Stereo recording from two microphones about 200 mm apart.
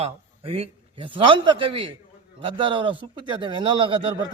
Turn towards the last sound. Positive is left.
turn(degrees=-25)  # may be behind; listen again after turning